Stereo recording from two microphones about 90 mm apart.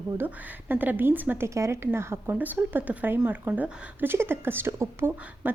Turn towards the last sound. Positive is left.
turn(degrees=-25)  # may be behind; listen again after turning